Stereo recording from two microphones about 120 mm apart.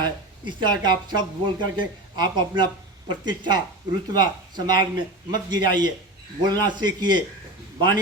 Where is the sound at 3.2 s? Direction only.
35° right (ahead or behind).